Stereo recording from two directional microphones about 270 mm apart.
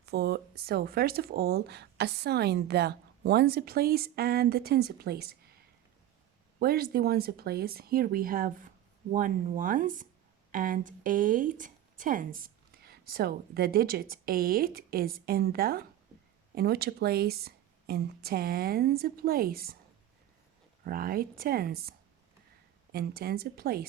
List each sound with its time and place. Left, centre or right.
0.0 s speech: right
6.6 s speech: right
20.8 s speech: right